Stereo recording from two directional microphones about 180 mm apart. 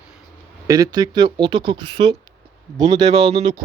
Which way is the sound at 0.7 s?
20° right (ahead or behind).